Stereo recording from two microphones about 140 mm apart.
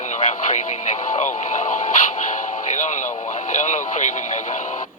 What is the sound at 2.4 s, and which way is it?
Radio, 55° left (ahead or behind).